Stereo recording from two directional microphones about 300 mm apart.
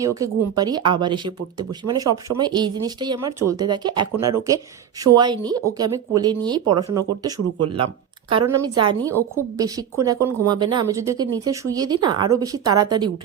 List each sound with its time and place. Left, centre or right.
0.0 s speech: centre